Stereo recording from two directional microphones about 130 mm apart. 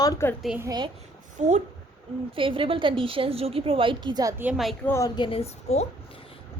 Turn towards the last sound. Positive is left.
turn(degrees=55)  # may be behind; listen again after turning